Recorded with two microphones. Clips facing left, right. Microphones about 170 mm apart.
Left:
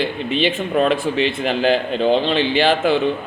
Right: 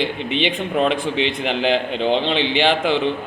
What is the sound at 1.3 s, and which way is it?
Speech, 20° right (ahead or behind).